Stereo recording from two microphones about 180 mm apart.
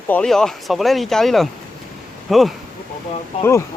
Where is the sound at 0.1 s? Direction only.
5° left (ahead or behind).